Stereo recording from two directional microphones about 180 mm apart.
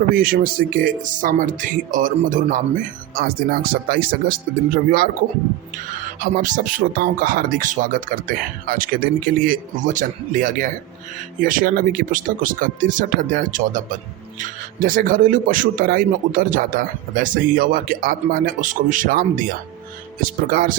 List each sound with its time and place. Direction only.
0.1 s speech: 55° right (ahead or behind)
6.1 s speech: 45° right (ahead or behind)